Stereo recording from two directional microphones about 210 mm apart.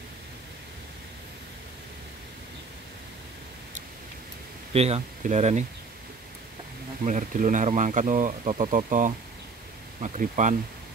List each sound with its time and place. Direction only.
4.7 s speech: 30° right (ahead or behind)
7.1 s speech: 35° right (ahead or behind)